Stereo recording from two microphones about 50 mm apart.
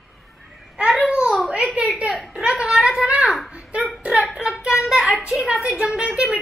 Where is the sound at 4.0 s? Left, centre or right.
Right.